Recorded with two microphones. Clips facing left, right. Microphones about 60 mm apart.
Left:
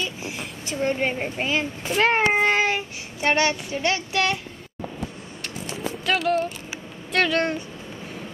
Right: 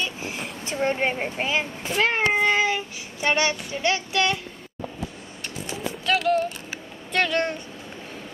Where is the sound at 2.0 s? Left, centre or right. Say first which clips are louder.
Left 2 dB; left.